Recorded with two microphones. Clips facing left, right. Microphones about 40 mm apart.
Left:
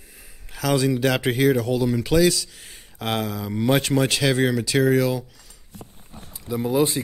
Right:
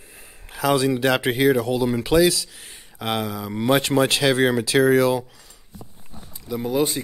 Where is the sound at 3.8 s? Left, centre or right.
Right.